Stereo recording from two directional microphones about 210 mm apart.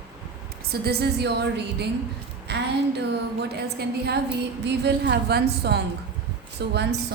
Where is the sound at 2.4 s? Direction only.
55° right (ahead or behind).